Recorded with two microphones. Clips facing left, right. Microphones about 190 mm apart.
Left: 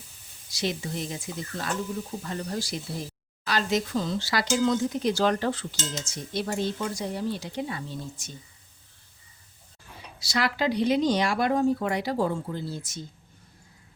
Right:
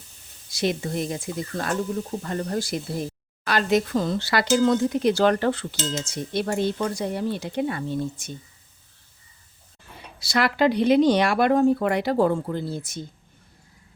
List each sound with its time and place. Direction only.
0.5 s speech: 55° right (ahead or behind)
10.2 s speech: 60° right (ahead or behind)